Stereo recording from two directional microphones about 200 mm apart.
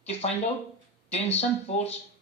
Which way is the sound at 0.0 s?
35° left (ahead or behind).